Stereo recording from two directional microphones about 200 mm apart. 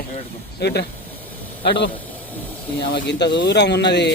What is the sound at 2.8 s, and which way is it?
Speech, 50° left (ahead or behind).